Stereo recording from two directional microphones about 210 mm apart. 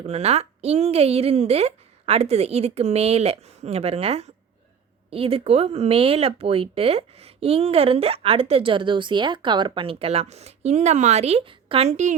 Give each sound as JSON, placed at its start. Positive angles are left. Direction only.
{"t": 0.0, "sound": "speech", "side_deg": -30}